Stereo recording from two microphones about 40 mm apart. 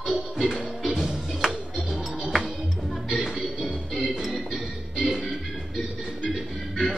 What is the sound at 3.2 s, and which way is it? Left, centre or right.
Music, centre.